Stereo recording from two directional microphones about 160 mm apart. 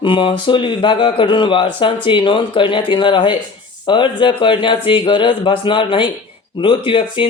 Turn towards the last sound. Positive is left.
turn(degrees=30)  # may be behind; listen again after turning